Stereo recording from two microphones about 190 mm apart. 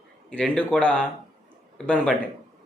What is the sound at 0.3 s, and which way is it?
Speech, 5° left (ahead or behind).